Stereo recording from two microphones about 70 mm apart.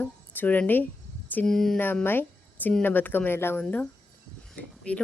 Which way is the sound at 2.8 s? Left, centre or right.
Left.